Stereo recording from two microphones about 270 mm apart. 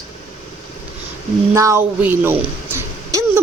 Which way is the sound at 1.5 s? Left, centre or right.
Centre.